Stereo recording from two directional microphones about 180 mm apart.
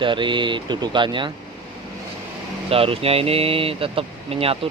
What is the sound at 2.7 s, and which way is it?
Speech, 30° right (ahead or behind).